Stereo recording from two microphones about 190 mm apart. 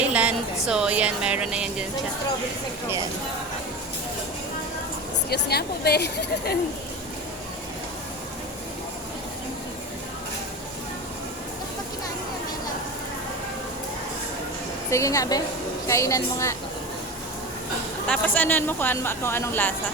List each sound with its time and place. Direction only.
0.0 s speech: 5° right (ahead or behind)
5.3 s speech: 55° left (ahead or behind)
14.8 s a woman's voice: 15° left (ahead or behind)
18.1 s a woman's voice: 10° left (ahead or behind)